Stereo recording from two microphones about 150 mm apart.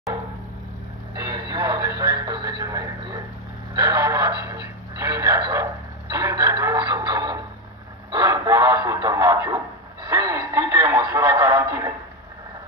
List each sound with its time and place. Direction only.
1.1 s radio: 25° right (ahead or behind)
3.7 s speech: 25° right (ahead or behind)